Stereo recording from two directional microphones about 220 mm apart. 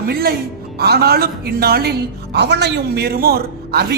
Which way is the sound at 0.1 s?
45° right (ahead or behind).